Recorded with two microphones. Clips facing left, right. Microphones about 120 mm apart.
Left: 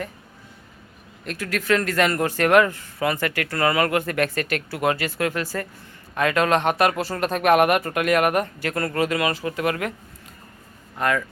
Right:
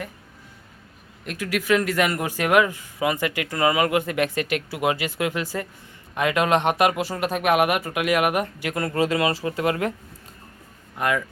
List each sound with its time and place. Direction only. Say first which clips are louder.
1.2 s speech: right 1 dB; 15° right (ahead or behind)
10.9 s speech: left 1 dB; 15° right (ahead or behind)